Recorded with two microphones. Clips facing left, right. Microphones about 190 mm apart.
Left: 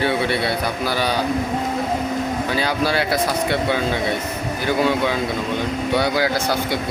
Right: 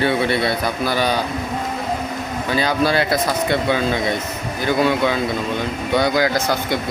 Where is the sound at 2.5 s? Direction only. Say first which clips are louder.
Right 5 dB; 10° left (ahead or behind).